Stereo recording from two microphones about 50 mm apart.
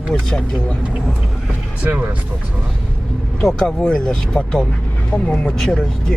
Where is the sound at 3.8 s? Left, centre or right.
Centre.